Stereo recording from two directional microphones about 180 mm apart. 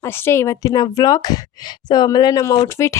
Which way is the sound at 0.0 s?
15° left (ahead or behind).